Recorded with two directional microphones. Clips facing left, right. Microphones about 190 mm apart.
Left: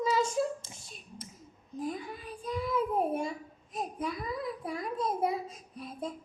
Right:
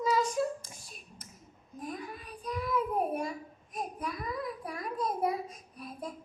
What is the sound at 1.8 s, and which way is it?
Child singing, 25° left (ahead or behind).